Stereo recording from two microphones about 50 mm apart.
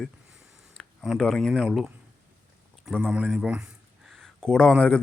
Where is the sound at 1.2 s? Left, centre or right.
Centre.